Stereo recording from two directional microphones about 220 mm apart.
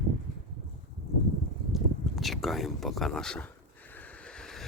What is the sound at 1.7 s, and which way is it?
Speech, centre (ahead or behind).